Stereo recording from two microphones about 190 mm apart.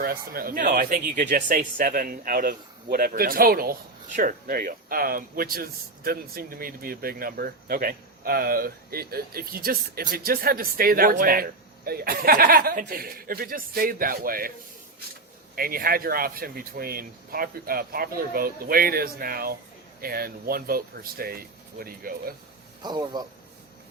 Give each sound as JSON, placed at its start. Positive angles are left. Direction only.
{"t": 0.0, "sound": "speech", "side_deg": -50}
{"t": 15.5, "sound": "speech", "side_deg": -50}
{"t": 22.8, "sound": "a man's voice", "side_deg": -20}